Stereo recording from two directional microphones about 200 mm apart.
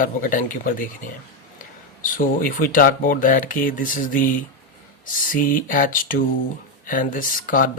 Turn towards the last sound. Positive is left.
turn(degrees=40)  # may be behind; listen again after turning